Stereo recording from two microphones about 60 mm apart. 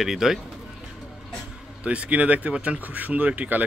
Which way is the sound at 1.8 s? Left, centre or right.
Right.